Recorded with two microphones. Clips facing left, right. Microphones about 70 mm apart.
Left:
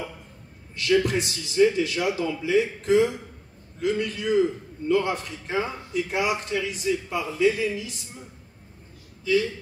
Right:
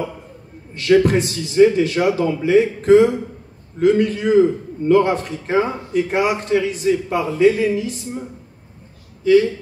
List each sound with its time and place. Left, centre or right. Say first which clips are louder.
0.7 s a man's voice: right 8 dB; right
9.2 s a man's voice: right 10 dB; right